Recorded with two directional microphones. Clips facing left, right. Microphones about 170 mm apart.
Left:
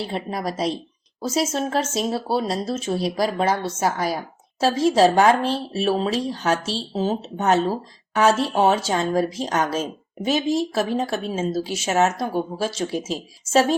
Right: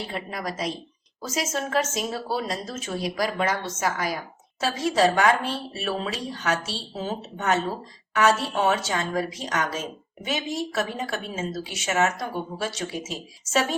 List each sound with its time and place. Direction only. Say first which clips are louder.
0.1 s speech: left 5 dB; 30° left (ahead or behind)